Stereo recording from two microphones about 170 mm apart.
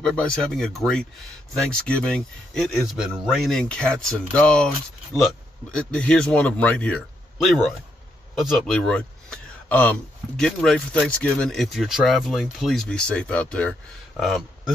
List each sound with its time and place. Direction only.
0.0 s speech: 5° left (ahead or behind)
5.8 s speech: 5° left (ahead or behind)